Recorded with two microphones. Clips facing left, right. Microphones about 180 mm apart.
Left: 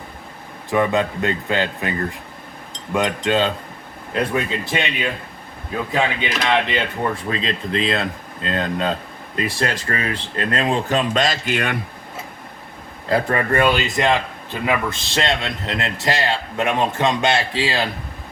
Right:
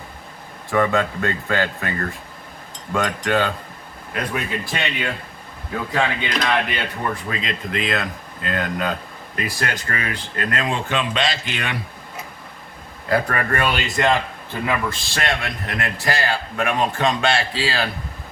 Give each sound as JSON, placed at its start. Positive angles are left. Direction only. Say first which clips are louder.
{"t": 0.7, "sound": "a man's voice", "louder": "left 1 dB", "side_deg": 15}
{"t": 13.1, "sound": "a man's voice", "louder": "left 2 dB", "side_deg": 25}